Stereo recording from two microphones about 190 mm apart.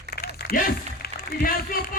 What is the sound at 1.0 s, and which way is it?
Speech, 50° left (ahead or behind).